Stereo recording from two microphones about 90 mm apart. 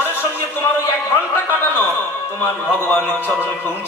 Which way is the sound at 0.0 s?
25° left (ahead or behind).